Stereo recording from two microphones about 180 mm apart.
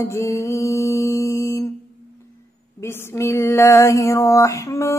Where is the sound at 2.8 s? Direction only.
15° left (ahead or behind).